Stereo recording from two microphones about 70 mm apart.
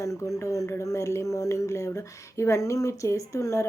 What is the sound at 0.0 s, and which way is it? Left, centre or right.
Speech, left.